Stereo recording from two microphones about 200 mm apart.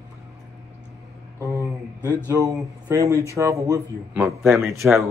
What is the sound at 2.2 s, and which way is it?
Speech, 15° right (ahead or behind).